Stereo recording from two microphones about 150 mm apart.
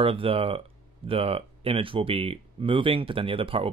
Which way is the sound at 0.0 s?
35° right (ahead or behind).